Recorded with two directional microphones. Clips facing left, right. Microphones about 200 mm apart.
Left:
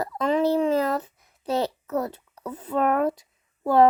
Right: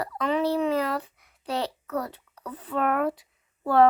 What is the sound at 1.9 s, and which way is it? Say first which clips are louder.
Speech: left 4 dB; 20° left (ahead or behind).